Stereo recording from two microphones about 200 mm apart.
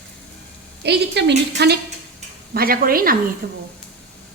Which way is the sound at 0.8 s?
55° right (ahead or behind).